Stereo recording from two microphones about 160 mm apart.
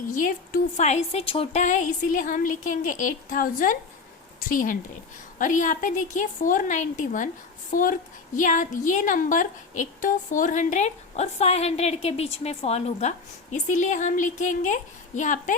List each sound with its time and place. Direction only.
0.1 s a woman's voice: 55° left (ahead or behind); by 1.6 s 35° left (ahead or behind)
1.6 s a woman's voice: 50° left (ahead or behind)